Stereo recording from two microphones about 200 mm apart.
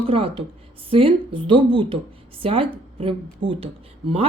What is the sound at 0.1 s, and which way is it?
Speech, 30° right (ahead or behind).